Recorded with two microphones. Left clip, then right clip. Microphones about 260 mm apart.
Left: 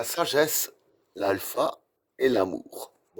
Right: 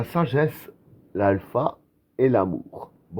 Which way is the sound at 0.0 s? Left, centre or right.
Left.